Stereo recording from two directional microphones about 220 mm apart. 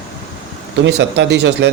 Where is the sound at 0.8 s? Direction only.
55° right (ahead or behind).